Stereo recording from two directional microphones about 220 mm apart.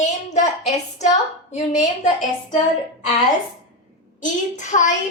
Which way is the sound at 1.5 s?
30° left (ahead or behind).